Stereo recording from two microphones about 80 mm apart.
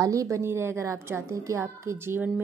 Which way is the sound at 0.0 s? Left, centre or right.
Right.